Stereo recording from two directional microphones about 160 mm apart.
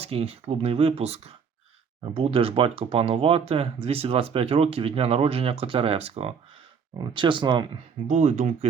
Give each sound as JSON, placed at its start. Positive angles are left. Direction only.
{"t": 0.0, "sound": "speech", "side_deg": -40}
{"t": 8.0, "sound": "speech", "side_deg": -50}